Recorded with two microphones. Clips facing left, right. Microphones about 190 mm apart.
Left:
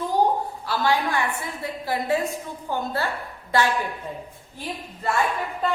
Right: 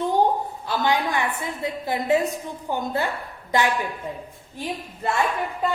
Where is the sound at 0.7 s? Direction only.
20° right (ahead or behind).